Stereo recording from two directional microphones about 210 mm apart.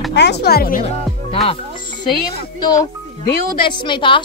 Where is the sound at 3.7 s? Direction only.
25° left (ahead or behind).